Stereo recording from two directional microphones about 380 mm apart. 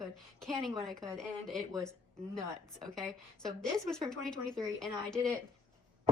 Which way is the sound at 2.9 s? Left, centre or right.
Centre.